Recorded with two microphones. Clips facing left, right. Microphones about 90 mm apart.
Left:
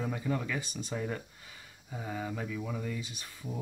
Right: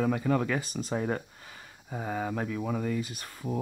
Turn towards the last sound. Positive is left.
turn(degrees=-60)  # may be behind; listen again after turning